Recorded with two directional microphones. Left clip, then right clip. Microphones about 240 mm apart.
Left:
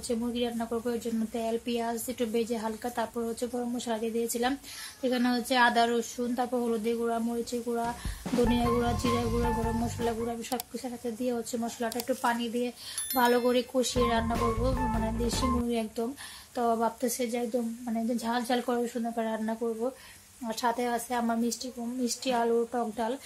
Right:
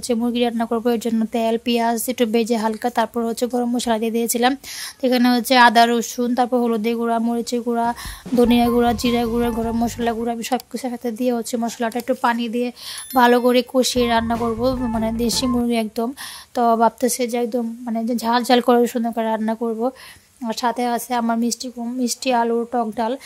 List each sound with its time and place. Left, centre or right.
0.1 s a woman's voice: right